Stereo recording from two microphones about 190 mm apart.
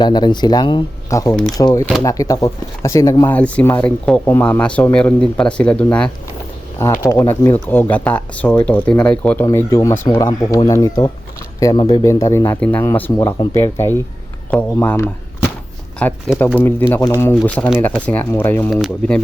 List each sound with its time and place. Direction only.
0.0 s speech: 25° left (ahead or behind); by 6.1 s 5° left (ahead or behind)
6.7 s speech: 15° left (ahead or behind)